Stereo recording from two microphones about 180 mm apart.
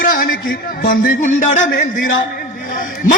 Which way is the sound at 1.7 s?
65° left (ahead or behind).